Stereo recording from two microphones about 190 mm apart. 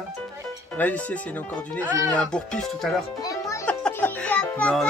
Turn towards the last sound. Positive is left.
turn(degrees=5)  # may be behind; listen again after turning